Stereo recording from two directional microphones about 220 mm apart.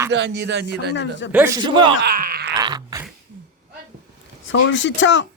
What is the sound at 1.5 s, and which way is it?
Speech, 20° right (ahead or behind).